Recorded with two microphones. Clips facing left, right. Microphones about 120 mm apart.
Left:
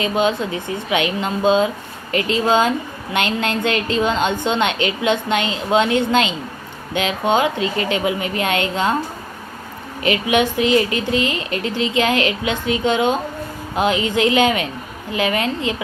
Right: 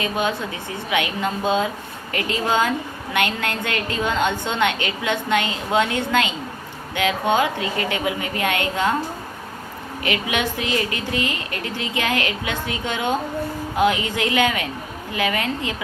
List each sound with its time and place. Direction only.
0.0 s a woman's voice: 20° left (ahead or behind)
10.0 s a woman's voice: 25° left (ahead or behind)